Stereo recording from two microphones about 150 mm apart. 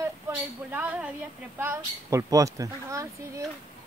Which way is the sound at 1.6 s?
20° right (ahead or behind).